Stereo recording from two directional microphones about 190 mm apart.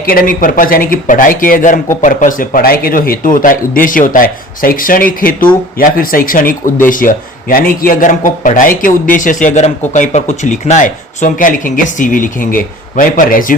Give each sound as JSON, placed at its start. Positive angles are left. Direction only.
{"t": 0.0, "sound": "speech", "side_deg": 50}